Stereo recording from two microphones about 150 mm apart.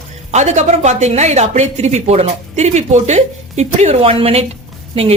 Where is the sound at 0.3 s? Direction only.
50° right (ahead or behind).